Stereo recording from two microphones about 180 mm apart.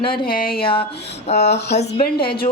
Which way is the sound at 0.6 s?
30° left (ahead or behind).